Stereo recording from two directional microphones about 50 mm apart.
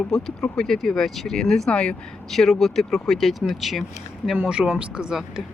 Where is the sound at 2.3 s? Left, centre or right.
Centre.